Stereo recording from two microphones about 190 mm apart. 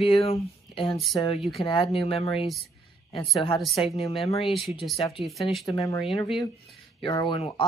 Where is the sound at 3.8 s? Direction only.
30° left (ahead or behind).